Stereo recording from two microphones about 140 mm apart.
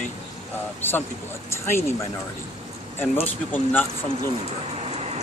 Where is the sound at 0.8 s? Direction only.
15° left (ahead or behind).